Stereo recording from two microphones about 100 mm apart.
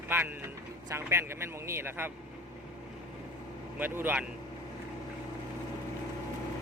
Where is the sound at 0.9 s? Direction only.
25° right (ahead or behind).